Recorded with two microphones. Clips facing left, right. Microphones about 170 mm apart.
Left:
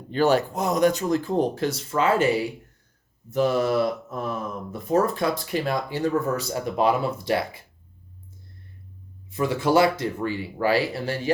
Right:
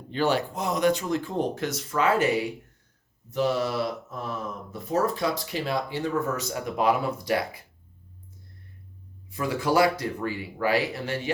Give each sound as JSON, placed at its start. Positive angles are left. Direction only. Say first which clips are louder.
{"t": 0.1, "sound": "speech", "louder": "left 4 dB", "side_deg": 45}
{"t": 3.2, "sound": "speech", "louder": "left 4 dB", "side_deg": 50}
{"t": 9.3, "sound": "speech", "louder": "left 4 dB", "side_deg": 25}